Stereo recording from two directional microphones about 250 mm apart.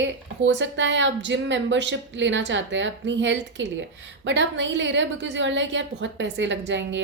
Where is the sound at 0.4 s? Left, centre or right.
Right.